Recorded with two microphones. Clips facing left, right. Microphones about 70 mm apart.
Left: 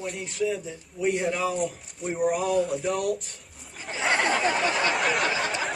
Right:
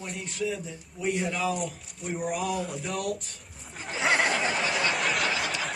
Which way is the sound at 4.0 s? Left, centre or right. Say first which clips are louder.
Even; centre.